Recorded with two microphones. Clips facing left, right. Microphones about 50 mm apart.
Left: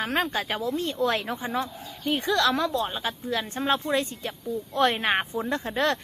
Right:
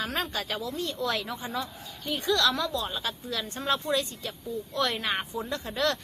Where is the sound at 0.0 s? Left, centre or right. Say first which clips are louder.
Left 5 dB; left.